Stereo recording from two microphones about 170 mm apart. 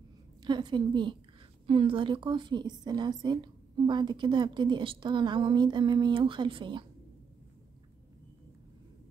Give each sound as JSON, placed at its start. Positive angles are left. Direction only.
{"t": 0.4, "sound": "a woman's voice", "side_deg": -25}